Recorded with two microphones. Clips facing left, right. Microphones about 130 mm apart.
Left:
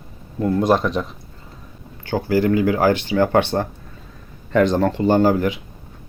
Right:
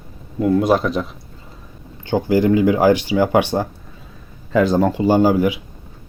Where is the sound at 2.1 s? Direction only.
20° right (ahead or behind).